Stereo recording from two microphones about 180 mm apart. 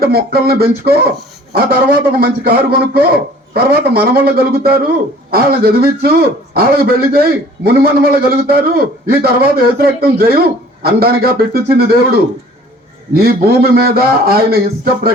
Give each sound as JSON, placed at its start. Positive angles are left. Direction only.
{"t": 0.0, "sound": "a man's voice", "side_deg": -60}